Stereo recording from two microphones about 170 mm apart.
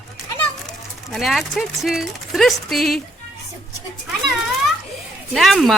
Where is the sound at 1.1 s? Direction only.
Centre (ahead or behind).